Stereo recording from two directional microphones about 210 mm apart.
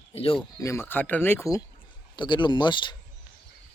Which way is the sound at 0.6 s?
15° left (ahead or behind).